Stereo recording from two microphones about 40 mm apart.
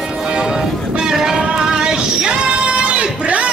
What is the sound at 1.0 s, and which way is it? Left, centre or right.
Music, centre.